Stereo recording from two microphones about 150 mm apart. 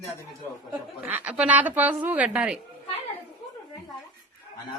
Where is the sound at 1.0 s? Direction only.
10° right (ahead or behind).